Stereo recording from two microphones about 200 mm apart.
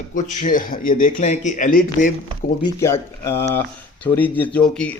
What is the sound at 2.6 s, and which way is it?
Speech, 15° left (ahead or behind).